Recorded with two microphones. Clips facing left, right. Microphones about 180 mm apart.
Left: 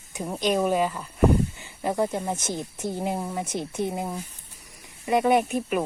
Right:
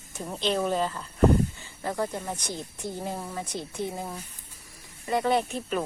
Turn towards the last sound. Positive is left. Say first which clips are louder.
# left 4 dB
turn(degrees=10)  # may be behind; listen again after turning